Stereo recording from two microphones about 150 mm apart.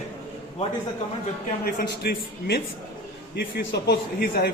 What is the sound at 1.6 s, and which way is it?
A man's voice, 85° left.